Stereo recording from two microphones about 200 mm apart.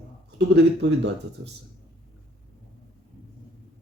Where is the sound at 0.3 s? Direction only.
55° right (ahead or behind).